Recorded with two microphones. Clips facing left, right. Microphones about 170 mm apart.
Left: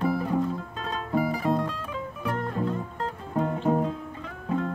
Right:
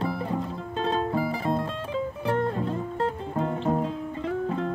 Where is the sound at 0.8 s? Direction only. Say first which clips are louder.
Right 2 dB; 30° right (ahead or behind).